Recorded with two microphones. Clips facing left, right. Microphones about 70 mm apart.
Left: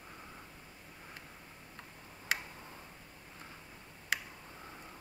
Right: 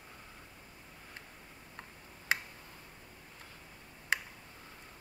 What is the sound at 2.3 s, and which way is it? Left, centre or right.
Tick, right.